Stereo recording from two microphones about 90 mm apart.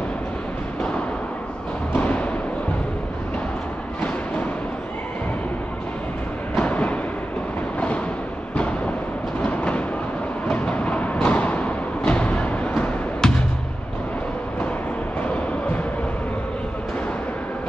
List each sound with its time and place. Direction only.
2.0 s timpani: 15° left (ahead or behind)
6.6 s a sound: 15° left (ahead or behind)
9.4 s train: 15° left (ahead or behind)
10.5 s music: 15° left (ahead or behind)